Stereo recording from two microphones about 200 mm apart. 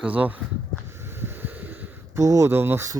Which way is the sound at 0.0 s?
5° right (ahead or behind).